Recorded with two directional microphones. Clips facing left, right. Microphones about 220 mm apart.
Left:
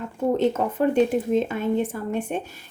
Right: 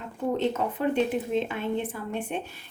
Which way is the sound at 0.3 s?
45° left (ahead or behind).